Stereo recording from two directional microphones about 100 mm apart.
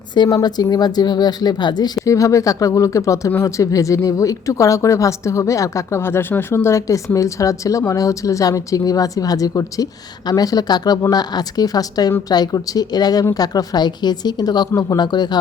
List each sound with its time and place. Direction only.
0.4 s speech: 40° left (ahead or behind)
2.0 s speech: 35° left (ahead or behind)
14.7 s speech: 30° left (ahead or behind)
14.9 s speech: 45° left (ahead or behind)